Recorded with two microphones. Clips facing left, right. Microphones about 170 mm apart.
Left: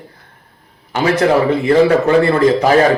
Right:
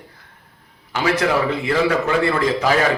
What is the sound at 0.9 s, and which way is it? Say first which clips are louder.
A man's voice: left 6 dB; 45° left (ahead or behind).